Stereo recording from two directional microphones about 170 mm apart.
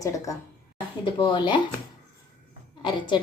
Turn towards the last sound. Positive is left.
turn(degrees=25)  # may be behind; listen again after turning